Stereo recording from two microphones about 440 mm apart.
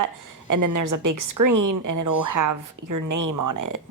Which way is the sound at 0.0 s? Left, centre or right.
Right.